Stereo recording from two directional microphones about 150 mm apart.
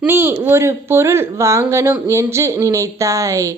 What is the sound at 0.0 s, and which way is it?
A woman's voice, 15° right (ahead or behind).